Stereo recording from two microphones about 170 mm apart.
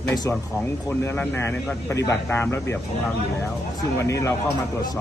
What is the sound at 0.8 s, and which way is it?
Speech, 15° left (ahead or behind).